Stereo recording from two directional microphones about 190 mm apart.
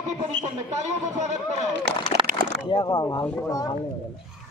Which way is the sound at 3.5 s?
20° left (ahead or behind).